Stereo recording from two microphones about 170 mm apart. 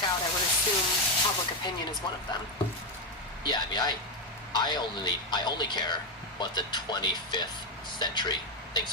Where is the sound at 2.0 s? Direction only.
25° left (ahead or behind).